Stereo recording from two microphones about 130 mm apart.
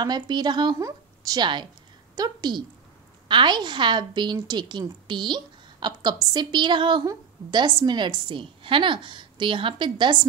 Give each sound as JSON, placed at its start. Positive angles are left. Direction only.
{"t": 0.0, "sound": "a woman's voice", "side_deg": -35}